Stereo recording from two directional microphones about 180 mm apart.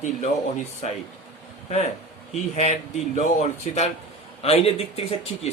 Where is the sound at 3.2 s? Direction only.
40° left (ahead or behind).